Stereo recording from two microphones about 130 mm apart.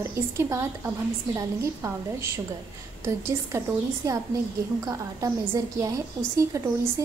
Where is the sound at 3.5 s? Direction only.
20° right (ahead or behind).